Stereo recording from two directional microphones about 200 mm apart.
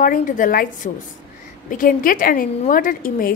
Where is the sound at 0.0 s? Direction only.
40° left (ahead or behind).